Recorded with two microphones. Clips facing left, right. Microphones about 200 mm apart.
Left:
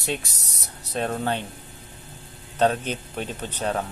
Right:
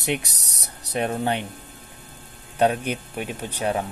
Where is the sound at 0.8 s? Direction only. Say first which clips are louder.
Right 2 dB; 15° right (ahead or behind).